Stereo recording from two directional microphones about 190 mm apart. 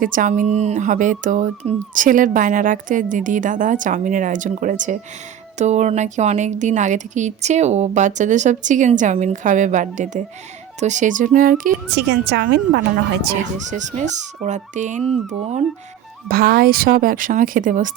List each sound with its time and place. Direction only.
0.0 s a woman's voice: 45° right (ahead or behind)
11.9 s a woman's voice: 60° right (ahead or behind)
13.4 s a woman's voice: 40° right (ahead or behind)
16.3 s speech: 55° right (ahead or behind)